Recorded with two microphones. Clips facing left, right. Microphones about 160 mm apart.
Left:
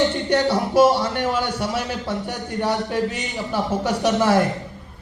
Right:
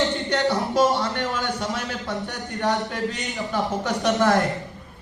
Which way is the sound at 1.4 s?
10° left (ahead or behind).